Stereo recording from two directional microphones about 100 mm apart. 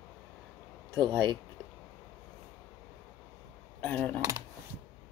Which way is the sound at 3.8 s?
15° left (ahead or behind).